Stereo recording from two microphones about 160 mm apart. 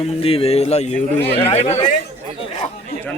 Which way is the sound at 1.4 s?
35° left (ahead or behind).